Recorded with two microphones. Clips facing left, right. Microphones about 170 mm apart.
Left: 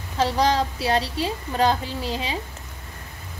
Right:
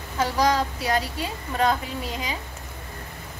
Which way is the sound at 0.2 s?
30° left (ahead or behind).